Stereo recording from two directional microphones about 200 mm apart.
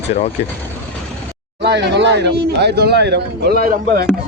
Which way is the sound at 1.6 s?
60° right (ahead or behind).